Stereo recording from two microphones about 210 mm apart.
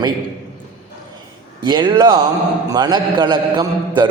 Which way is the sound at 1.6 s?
20° right (ahead or behind).